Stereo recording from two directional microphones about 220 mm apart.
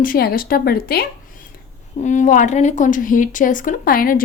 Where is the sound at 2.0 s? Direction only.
35° left (ahead or behind).